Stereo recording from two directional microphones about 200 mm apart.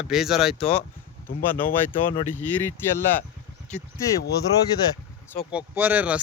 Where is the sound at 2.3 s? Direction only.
10° left (ahead or behind).